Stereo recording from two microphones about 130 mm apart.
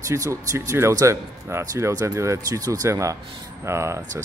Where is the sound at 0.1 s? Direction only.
25° right (ahead or behind).